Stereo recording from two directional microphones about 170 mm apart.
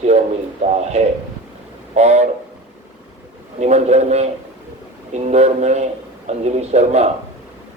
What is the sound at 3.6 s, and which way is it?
A man's voice, 40° right (ahead or behind).